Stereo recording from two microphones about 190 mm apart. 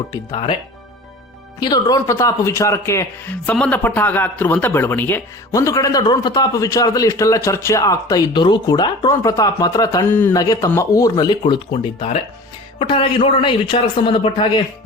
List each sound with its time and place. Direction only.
0.1 s a man's voice: 20° left (ahead or behind)
1.5 s a man's voice: 20° left (ahead or behind)